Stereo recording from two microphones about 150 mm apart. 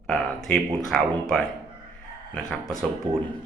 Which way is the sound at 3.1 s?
30° right (ahead or behind).